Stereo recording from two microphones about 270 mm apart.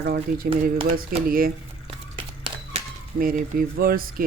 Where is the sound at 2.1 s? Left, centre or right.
Centre.